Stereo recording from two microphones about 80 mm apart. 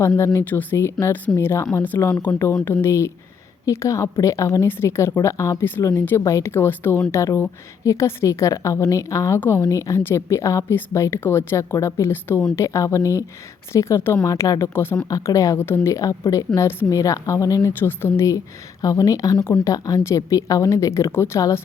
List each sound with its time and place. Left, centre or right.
0.3 s a woman's voice: left
14.3 s speech: left
14.7 s speech: left
15.1 s speech: left
15.5 s a woman's voice: left
18.3 s a woman's voice: left